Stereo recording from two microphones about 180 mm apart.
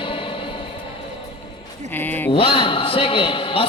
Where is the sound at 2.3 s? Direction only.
30° left (ahead or behind).